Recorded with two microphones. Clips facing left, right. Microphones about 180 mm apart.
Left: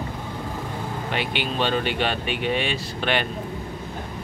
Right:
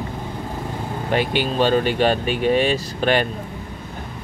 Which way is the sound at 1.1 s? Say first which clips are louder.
Right 8 dB; 40° right (ahead or behind).